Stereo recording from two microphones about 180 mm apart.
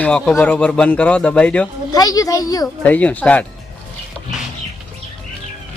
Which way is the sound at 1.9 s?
20° left (ahead or behind).